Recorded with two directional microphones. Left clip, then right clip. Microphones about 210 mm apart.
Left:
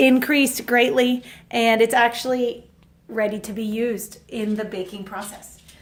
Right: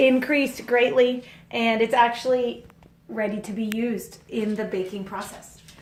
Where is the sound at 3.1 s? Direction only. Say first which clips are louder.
Left 4 dB; 30° left (ahead or behind).